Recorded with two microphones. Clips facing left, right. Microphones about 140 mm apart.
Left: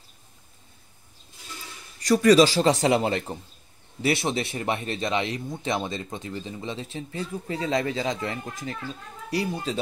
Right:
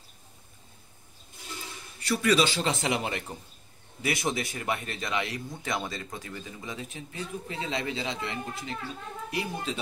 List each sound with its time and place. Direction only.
2.0 s a man's voice: 40° left (ahead or behind)